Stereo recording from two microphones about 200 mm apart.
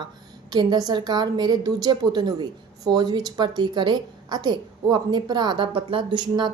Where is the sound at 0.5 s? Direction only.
20° right (ahead or behind).